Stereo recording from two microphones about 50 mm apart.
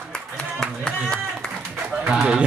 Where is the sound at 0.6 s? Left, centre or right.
Centre.